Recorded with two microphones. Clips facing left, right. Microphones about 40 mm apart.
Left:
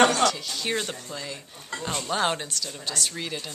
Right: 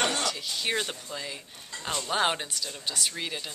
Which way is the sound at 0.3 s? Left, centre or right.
Centre.